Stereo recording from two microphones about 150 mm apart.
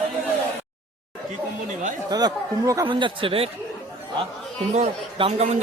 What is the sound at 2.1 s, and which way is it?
Speech, 25° right (ahead or behind).